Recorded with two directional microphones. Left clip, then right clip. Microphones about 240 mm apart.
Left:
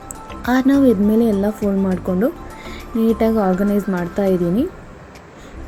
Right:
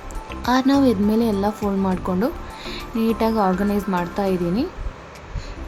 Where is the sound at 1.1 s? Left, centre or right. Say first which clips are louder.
Left 4 dB; centre.